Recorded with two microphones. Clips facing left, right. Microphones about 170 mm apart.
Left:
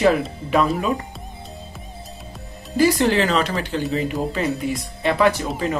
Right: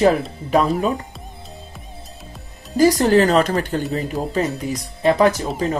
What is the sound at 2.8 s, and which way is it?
A woman's voice, 40° right (ahead or behind).